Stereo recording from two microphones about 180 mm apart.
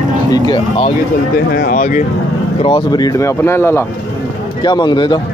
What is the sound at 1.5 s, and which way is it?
Speech, 50° left (ahead or behind).